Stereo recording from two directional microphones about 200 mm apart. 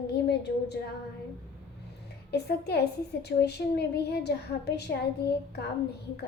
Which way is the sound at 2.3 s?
55° left (ahead or behind).